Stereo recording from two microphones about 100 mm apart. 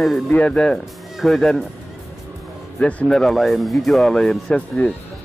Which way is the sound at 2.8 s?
10° left (ahead or behind).